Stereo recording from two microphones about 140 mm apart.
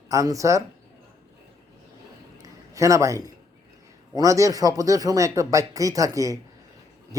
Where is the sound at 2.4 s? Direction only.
25° right (ahead or behind).